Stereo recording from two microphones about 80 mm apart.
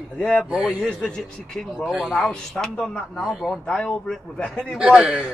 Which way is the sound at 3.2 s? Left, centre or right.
Centre.